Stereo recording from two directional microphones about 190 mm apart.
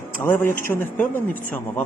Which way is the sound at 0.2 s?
10° left (ahead or behind).